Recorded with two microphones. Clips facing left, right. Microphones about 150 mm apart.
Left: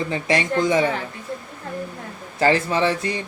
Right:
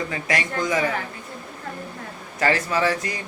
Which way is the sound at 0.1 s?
30° left (ahead or behind).